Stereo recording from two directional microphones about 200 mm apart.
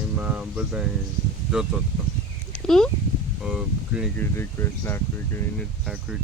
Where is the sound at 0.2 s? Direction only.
5° right (ahead or behind).